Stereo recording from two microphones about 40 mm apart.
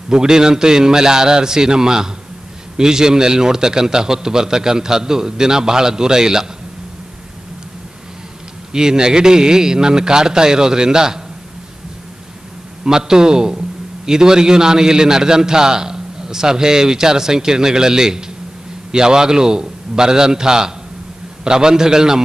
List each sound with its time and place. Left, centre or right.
0.1 s a man's voice: centre
8.7 s a man's voice: centre
12.8 s a man's voice: centre